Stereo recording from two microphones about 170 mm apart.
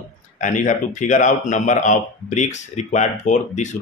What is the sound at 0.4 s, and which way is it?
Speech, 45° left (ahead or behind).